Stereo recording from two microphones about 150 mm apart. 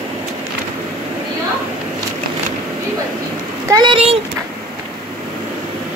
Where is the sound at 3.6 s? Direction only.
25° right (ahead or behind).